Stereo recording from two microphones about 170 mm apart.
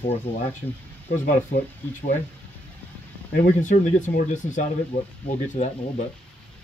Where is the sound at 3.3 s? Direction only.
50° left (ahead or behind).